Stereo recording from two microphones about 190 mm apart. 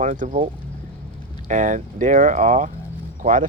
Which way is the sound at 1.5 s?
40° right (ahead or behind).